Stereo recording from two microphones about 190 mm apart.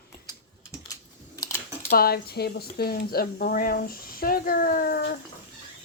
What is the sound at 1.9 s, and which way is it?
Speech, 55° left (ahead or behind).